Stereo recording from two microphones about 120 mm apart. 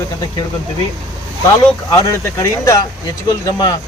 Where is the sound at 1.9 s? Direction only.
25° left (ahead or behind).